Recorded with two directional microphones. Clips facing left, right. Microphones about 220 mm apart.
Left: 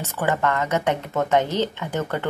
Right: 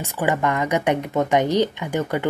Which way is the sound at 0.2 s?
15° right (ahead or behind).